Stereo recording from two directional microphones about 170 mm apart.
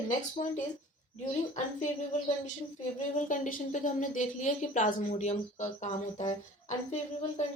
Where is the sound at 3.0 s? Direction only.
45° left (ahead or behind).